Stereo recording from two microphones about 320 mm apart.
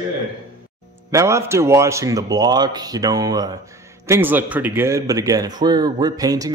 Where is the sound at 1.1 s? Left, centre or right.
Centre.